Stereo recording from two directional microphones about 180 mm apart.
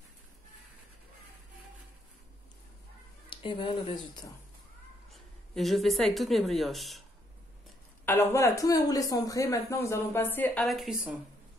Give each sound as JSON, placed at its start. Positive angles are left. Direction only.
{"t": 3.3, "sound": "speech", "side_deg": 30}
{"t": 5.1, "sound": "speech", "side_deg": 0}
{"t": 8.0, "sound": "a woman's voice", "side_deg": 15}
{"t": 10.6, "sound": "a woman's voice", "side_deg": 0}